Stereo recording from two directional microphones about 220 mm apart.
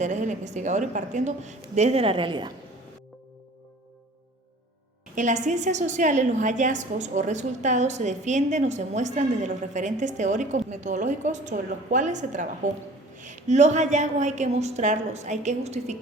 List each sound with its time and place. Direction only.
0.0 s a woman's voice: 35° right (ahead or behind)
5.1 s a woman's voice: 35° right (ahead or behind)